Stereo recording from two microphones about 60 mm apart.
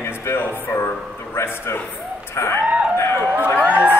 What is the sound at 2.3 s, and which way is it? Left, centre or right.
Music, left.